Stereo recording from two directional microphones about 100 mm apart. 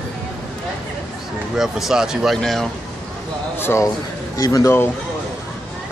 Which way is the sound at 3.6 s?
25° left (ahead or behind).